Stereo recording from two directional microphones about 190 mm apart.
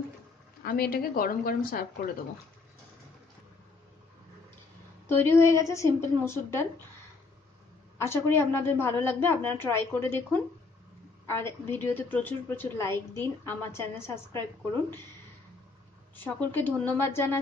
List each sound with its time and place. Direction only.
0.7 s a woman's voice: 55° left (ahead or behind)
5.0 s a woman's voice: 10° left (ahead or behind)
8.0 s a woman's voice: 15° left (ahead or behind)
16.3 s a woman's voice: 10° left (ahead or behind)